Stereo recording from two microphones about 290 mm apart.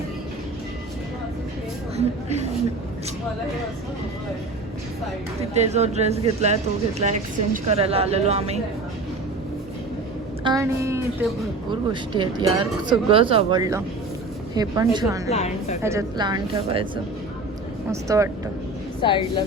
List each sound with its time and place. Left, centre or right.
2.0 s a sound: right
5.4 s a woman's voice: right
10.4 s speech: centre
15.3 s a woman's voice: left
15.8 s speech: centre
18.1 s speech: centre
19.0 s a woman's voice: centre